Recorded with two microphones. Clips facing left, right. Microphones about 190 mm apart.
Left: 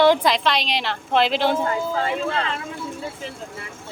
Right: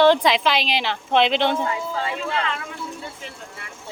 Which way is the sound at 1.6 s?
45° left (ahead or behind).